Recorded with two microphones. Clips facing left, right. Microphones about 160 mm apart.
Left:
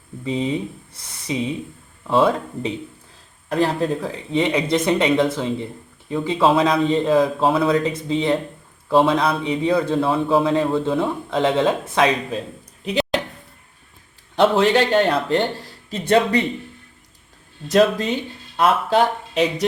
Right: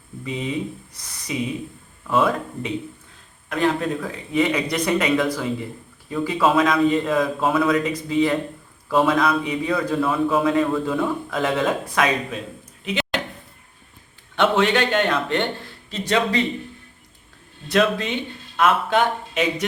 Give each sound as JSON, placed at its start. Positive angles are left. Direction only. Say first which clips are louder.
{"t": 0.3, "sound": "a man's voice", "louder": "left 4 dB", "side_deg": 30}
{"t": 14.3, "sound": "speech", "louder": "left 3 dB", "side_deg": 35}
{"t": 17.7, "sound": "speech", "louder": "left 4 dB", "side_deg": 40}